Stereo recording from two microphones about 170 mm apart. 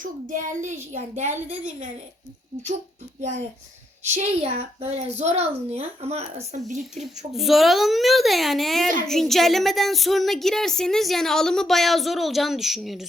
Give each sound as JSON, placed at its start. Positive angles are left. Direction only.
{"t": 0.0, "sound": "a woman's voice", "side_deg": -50}
{"t": 3.2, "sound": "a woman's voice", "side_deg": -45}
{"t": 7.3, "sound": "speech", "side_deg": 0}